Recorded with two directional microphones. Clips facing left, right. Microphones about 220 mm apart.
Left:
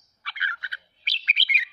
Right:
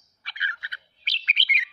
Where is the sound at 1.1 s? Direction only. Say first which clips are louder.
Even; 10° left (ahead or behind).